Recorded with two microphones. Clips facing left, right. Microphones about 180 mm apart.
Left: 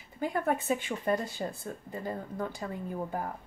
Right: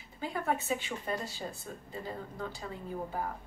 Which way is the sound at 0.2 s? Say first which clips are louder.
Left 4 dB; 50° left (ahead or behind).